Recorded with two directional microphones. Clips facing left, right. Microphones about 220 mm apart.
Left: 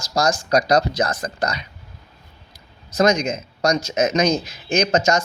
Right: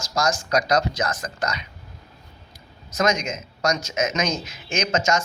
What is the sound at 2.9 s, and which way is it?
A man's voice, 35° left (ahead or behind).